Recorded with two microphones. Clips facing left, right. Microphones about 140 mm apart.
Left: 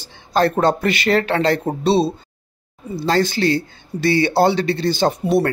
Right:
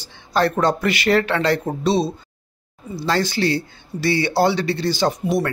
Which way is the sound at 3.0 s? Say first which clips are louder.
Left 3 dB; 50° left (ahead or behind).